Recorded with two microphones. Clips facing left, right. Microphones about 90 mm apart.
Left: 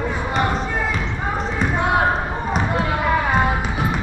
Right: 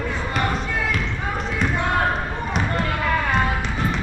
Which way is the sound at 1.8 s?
10° left (ahead or behind).